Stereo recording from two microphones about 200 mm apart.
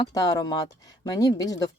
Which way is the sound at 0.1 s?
20° left (ahead or behind).